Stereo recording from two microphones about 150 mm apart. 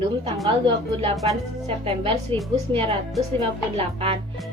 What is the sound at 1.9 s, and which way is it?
A woman's voice, 40° right (ahead or behind).